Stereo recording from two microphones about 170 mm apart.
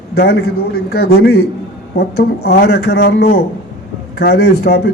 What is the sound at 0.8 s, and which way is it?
A man's voice, 70° left (ahead or behind).